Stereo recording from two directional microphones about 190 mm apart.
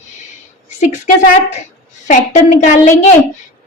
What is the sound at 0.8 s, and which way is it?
A woman's voice, 40° left (ahead or behind).